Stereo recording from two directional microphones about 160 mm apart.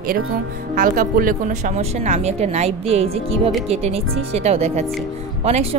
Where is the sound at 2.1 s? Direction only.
45° right (ahead or behind).